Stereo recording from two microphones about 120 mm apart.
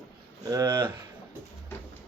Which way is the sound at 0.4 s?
30° right (ahead or behind).